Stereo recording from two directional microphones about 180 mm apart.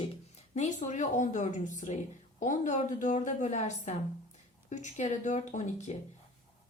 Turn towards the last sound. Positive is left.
turn(degrees=40)  # may be behind; listen again after turning